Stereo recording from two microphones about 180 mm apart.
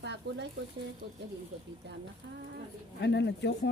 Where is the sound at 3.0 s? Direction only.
75° left (ahead or behind).